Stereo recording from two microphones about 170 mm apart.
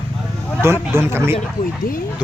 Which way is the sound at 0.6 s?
15° right (ahead or behind).